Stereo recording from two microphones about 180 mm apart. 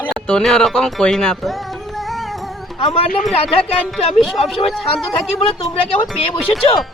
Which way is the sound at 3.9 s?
Centre (ahead or behind).